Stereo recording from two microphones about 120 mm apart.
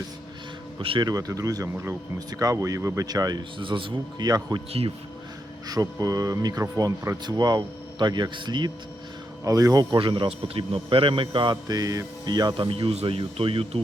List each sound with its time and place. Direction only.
0.8 s speech: 45° right (ahead or behind)
1.0 s speech: 30° right (ahead or behind); by 4.3 s 45° right (ahead or behind)
4.3 s speech: 30° right (ahead or behind)
5.6 s speech: 30° right (ahead or behind)
10.0 s speech: 45° right (ahead or behind)